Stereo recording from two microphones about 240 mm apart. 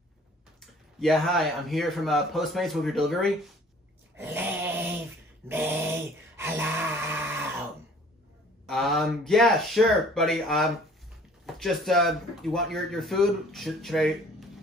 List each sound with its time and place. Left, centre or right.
0.6 s speech: centre
4.2 s dog: centre
5.5 s a sound: centre
8.6 s speech: centre